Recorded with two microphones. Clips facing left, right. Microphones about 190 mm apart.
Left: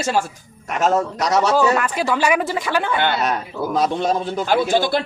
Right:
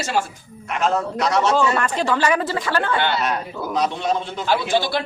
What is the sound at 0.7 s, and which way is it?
Speech, 40° left (ahead or behind).